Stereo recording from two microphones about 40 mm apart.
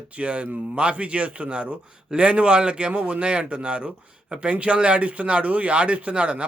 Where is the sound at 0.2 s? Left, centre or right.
Right.